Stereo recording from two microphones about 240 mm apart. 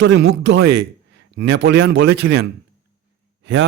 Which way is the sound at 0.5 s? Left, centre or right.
Right.